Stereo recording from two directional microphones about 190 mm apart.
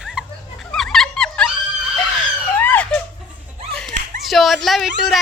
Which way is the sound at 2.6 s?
10° left (ahead or behind).